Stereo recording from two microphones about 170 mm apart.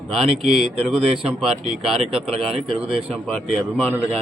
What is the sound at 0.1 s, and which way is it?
Speech, centre (ahead or behind).